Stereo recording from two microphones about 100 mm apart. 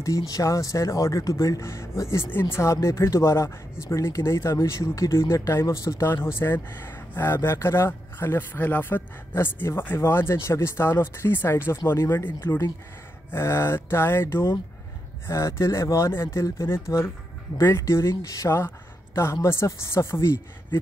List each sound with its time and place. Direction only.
0.0 s speech: 35° left (ahead or behind)
12.4 s speech: 30° left (ahead or behind)